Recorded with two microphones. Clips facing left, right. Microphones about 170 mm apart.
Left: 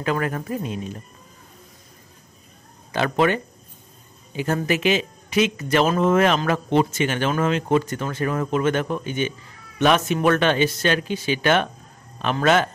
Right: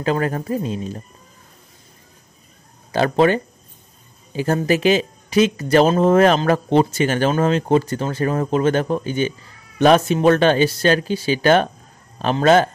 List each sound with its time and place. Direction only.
0.0 s speech: 30° right (ahead or behind)
2.9 s speech: 35° right (ahead or behind)